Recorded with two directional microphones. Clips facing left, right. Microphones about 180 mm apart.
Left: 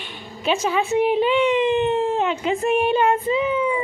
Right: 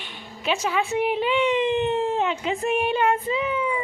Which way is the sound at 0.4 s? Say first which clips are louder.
Left 3 dB; 25° left (ahead or behind).